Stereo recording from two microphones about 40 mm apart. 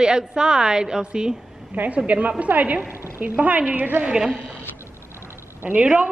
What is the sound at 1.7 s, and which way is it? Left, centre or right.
A woman's voice, right.